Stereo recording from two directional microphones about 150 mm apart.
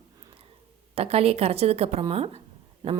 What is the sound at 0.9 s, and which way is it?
A woman's voice, 40° right (ahead or behind).